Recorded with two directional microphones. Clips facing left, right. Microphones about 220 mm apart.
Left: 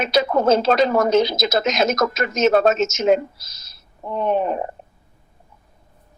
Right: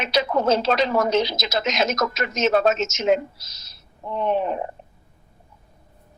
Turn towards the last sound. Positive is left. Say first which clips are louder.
# left 2 dB
turn(degrees=45)  # may be behind; listen again after turning